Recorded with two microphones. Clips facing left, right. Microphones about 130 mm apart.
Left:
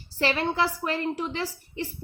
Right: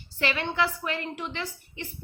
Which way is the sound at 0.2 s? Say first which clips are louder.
Left 2 dB; 35° left (ahead or behind).